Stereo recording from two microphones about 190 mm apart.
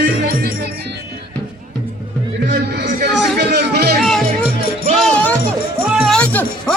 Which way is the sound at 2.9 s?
50° right (ahead or behind).